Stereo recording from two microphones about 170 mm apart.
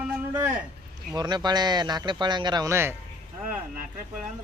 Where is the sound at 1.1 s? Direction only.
25° right (ahead or behind).